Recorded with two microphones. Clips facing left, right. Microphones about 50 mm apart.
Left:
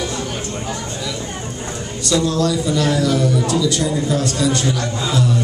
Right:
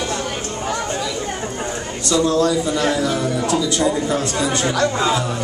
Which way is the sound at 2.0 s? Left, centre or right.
Right.